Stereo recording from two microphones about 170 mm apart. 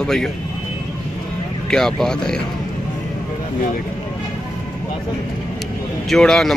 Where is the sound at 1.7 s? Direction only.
5° left (ahead or behind).